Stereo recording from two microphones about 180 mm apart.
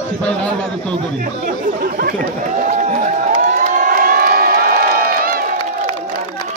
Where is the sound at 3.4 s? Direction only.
45° right (ahead or behind).